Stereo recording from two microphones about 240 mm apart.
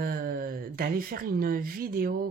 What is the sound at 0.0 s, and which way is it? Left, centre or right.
Speech, right.